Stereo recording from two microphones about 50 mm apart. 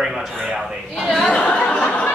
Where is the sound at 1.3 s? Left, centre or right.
Left.